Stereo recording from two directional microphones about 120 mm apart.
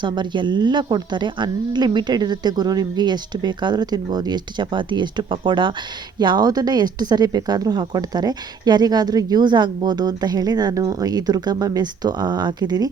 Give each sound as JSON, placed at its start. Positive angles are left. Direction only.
{"t": 0.0, "sound": "speech", "side_deg": -40}